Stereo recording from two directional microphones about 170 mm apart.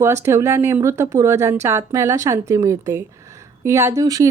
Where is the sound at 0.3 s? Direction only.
15° right (ahead or behind).